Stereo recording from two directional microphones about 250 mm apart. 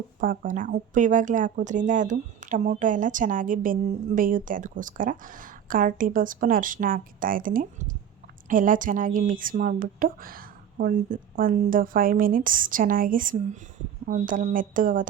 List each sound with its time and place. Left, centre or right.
0.2 s speech: right